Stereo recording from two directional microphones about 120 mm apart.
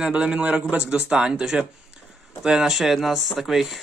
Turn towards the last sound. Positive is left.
turn(degrees=0)  # may be behind; listen again after turning